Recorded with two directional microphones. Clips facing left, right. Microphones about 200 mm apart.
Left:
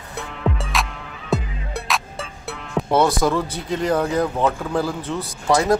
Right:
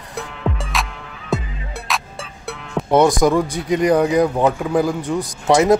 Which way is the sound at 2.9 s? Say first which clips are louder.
Right 4 dB; 15° right (ahead or behind).